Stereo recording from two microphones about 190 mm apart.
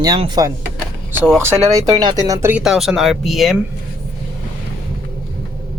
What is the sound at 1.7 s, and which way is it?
Speech, 20° right (ahead or behind).